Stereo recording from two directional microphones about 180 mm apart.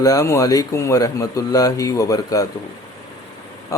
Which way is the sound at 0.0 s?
20° left (ahead or behind).